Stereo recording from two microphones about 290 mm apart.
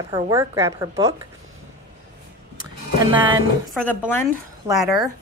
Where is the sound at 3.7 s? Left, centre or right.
Centre.